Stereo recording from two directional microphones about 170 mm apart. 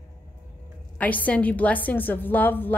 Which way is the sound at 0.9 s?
10° left (ahead or behind).